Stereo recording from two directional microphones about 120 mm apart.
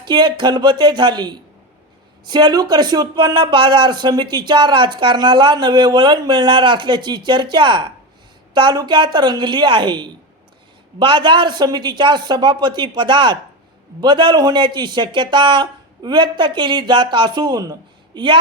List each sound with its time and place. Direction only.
0.0 s speech: 40° right (ahead or behind)